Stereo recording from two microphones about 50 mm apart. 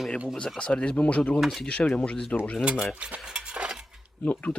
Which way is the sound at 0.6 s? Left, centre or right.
Left.